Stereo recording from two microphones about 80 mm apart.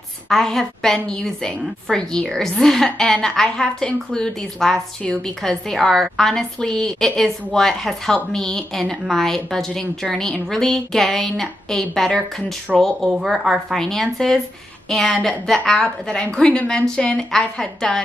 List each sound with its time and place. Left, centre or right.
0.3 s a woman's voice: centre